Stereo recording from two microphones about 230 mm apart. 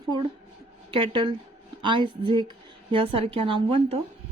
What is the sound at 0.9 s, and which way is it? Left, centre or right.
A woman's voice, right.